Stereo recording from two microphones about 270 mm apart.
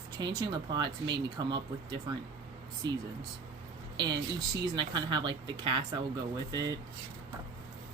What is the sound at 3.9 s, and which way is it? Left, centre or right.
A woman's voice, centre.